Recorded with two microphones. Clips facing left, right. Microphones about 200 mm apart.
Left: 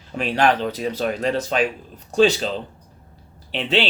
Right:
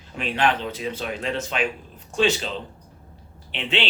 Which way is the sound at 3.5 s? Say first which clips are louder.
Left 5 dB; 35° left (ahead or behind).